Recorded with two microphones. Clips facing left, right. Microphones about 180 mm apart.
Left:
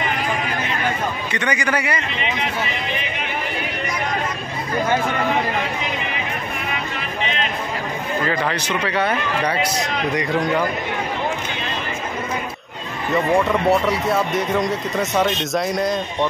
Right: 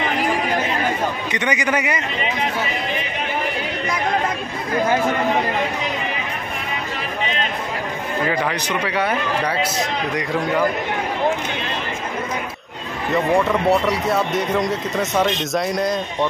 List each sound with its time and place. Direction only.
1.3 s a man's voice: 20° right (ahead or behind)
8.3 s speech: 15° right (ahead or behind)
13.1 s speech: centre (ahead or behind)